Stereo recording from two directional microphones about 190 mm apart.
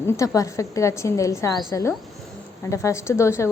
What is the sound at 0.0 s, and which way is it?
A woman's voice, 15° left (ahead or behind).